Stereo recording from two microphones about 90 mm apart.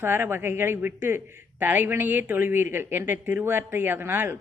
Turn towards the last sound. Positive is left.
turn(degrees=-25)  # may be behind; listen again after turning